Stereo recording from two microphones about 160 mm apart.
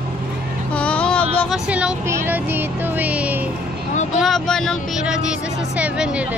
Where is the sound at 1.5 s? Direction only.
10° right (ahead or behind).